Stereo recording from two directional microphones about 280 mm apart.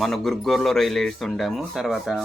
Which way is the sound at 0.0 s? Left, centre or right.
Centre.